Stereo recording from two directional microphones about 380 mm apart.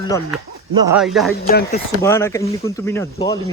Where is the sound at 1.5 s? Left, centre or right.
Left.